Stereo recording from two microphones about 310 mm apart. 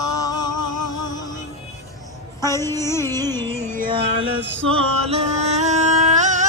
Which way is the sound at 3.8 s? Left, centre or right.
Centre.